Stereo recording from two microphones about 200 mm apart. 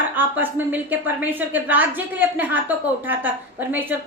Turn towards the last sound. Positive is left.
turn(degrees=-10)  # may be behind; listen again after turning